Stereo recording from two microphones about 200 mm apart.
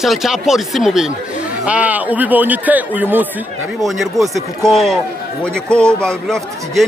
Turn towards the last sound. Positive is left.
turn(degrees=0)  # may be behind; listen again after turning